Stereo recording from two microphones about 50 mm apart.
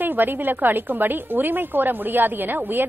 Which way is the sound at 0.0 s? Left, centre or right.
Right.